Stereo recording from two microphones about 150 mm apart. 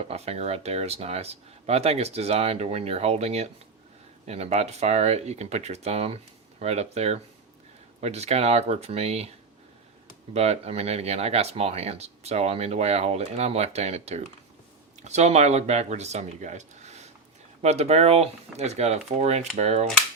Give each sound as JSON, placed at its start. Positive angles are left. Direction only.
{"t": 0.1, "sound": "speech", "side_deg": -45}
{"t": 10.3, "sound": "speech", "side_deg": -45}